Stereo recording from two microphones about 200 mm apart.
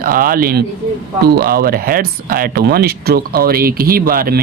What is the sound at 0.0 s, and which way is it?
Speech, 45° right (ahead or behind).